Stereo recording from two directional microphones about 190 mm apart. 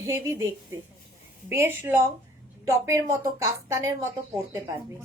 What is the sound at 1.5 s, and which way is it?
A woman's voice, 15° right (ahead or behind).